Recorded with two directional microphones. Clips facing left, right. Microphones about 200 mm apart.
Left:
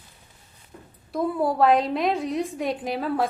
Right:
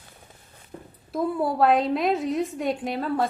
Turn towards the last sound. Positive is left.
turn(degrees=0)  # may be behind; listen again after turning